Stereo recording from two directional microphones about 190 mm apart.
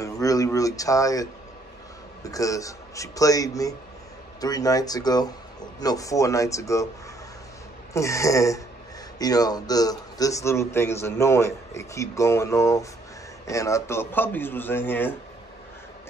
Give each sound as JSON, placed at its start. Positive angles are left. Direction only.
{"t": 0.0, "sound": "a man's voice", "side_deg": 20}
{"t": 7.9, "sound": "a man's voice", "side_deg": 15}